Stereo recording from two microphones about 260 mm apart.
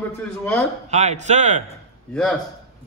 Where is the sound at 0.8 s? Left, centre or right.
Right.